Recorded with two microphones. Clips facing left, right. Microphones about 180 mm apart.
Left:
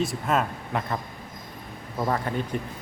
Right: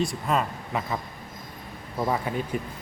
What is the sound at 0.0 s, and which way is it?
Speech, centre (ahead or behind).